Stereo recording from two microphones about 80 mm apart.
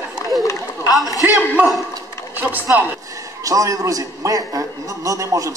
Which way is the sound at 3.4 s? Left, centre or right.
Right.